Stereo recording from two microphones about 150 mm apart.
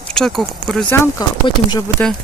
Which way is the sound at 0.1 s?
5° left (ahead or behind).